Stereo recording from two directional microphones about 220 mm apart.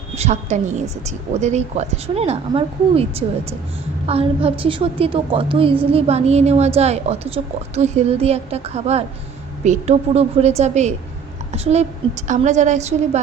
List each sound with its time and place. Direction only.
0.2 s a woman's voice: 30° right (ahead or behind)